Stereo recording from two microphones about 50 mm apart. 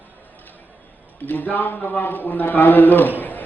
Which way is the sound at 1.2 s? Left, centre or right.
Left.